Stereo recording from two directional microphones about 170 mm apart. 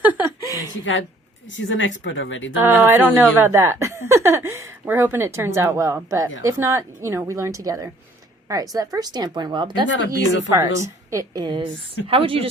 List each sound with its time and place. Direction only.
0.0 s chuckle: 10° right (ahead or behind)
1.5 s speech: 90° left
2.6 s a woman's voice: 10° right (ahead or behind); by 9.8 s 25° right (ahead or behind)
9.8 s speech: 90° left
10.5 s a woman's voice: 20° right (ahead or behind)